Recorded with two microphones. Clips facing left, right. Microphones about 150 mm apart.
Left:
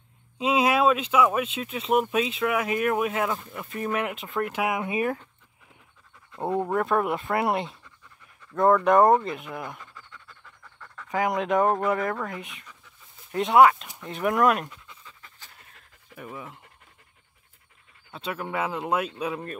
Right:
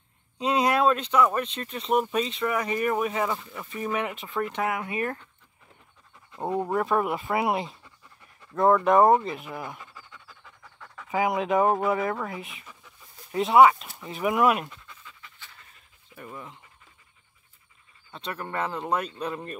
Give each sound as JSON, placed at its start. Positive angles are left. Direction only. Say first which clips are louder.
{"t": 0.4, "sound": "speech", "louder": "left 1 dB", "side_deg": 0}
{"t": 4.7, "sound": "speech", "louder": "left 3 dB", "side_deg": 15}
{"t": 6.3, "sound": "speech", "louder": "left 1 dB", "side_deg": 0}
{"t": 15.0, "sound": "pant", "louder": "right 1 dB", "side_deg": 40}
{"t": 16.2, "sound": "speech", "louder": "left 2 dB", "side_deg": 5}
{"t": 18.1, "sound": "speech", "louder": "left 2 dB", "side_deg": 5}